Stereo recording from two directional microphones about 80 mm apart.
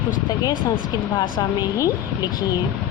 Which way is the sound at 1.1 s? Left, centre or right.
Left.